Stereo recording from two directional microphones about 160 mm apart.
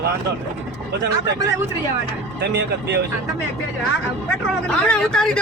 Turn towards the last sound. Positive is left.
turn(degrees=5)  # may be behind; listen again after turning